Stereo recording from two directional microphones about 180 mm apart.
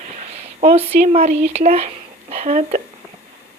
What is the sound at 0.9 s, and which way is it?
Speech, 40° right (ahead or behind).